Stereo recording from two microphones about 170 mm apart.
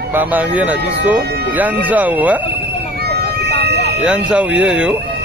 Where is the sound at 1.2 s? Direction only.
70° right (ahead or behind).